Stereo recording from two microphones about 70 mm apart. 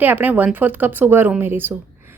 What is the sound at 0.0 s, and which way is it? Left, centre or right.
A woman's voice, right.